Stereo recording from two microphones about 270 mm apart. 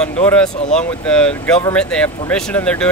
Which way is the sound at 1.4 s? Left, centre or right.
Centre.